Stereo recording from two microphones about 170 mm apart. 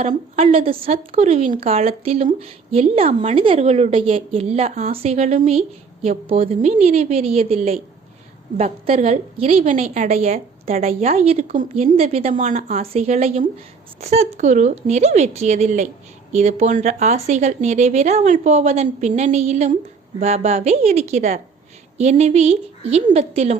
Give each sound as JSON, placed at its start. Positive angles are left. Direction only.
{"t": 0.3, "sound": "a woman's voice", "side_deg": -35}
{"t": 12.4, "sound": "a woman's voice", "side_deg": -50}